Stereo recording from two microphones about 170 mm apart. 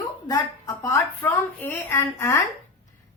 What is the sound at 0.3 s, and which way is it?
A woman's voice, 20° left (ahead or behind).